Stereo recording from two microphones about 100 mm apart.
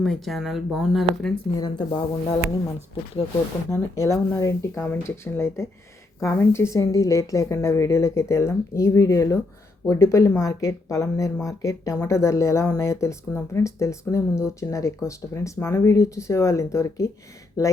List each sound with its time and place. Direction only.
0.0 s speech: centre (ahead or behind)
1.5 s speech: 40° left (ahead or behind)
3.7 s speech: 30° left (ahead or behind)